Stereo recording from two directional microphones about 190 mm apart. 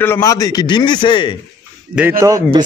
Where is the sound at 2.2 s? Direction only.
20° right (ahead or behind).